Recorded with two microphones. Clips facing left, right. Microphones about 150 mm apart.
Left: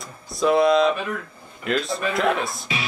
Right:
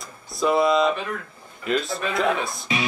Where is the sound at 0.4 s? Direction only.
Centre (ahead or behind).